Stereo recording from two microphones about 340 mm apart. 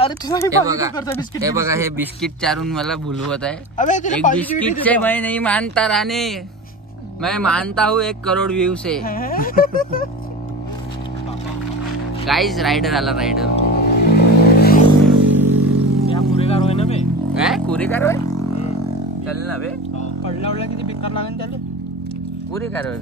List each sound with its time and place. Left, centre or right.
0.0 s speech: centre
1.4 s a man's voice: centre
3.7 s speech: left
4.4 s a man's voice: centre
9.0 s speech: left
12.3 s a man's voice: centre
13.6 s a sound: left
15.0 s a sound: centre
16.1 s vehicle: centre
17.3 s vehicle: centre
19.4 s speech: right
20.4 s speech: centre